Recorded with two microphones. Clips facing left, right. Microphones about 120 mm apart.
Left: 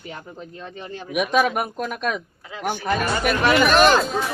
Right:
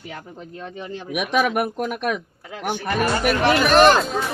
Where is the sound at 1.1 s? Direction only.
65° right (ahead or behind).